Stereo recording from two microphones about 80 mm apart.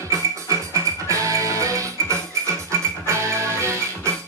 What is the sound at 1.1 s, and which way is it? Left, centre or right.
Music, right.